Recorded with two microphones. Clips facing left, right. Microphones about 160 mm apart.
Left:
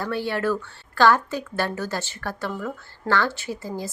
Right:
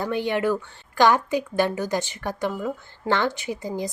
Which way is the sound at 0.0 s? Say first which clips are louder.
Right 2 dB; 15° right (ahead or behind).